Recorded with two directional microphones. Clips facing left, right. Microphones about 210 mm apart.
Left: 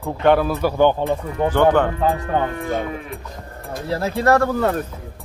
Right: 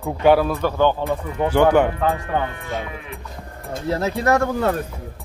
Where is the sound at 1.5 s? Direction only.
10° right (ahead or behind).